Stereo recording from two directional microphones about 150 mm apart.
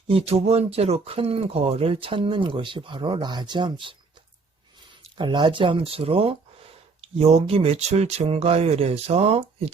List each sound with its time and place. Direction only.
0.1 s speech: 40° right (ahead or behind)
5.1 s speech: 30° right (ahead or behind)